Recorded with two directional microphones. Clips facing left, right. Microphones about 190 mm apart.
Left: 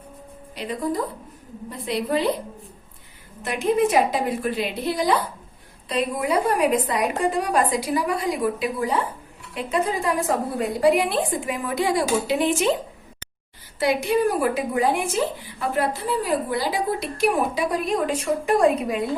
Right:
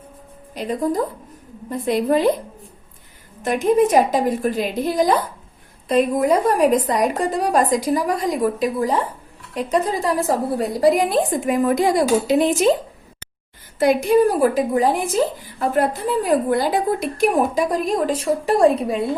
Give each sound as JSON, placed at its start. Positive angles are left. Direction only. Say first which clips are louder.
{"t": 0.5, "sound": "speech", "louder": "right 5 dB", "side_deg": -45}
{"t": 1.8, "sound": "a woman's voice", "louder": "right 6 dB", "side_deg": -45}
{"t": 3.4, "sound": "a woman's voice", "louder": "right 4 dB", "side_deg": -45}
{"t": 13.7, "sound": "a woman's voice", "louder": "right 6 dB", "side_deg": -45}